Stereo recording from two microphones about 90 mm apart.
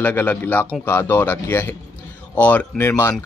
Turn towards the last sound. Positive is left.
turn(degrees=30)  # may be behind; listen again after turning